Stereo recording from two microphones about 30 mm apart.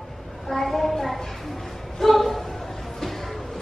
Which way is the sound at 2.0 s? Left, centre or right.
Centre.